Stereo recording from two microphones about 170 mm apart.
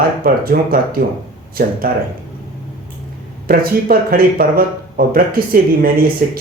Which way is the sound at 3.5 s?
60° right (ahead or behind).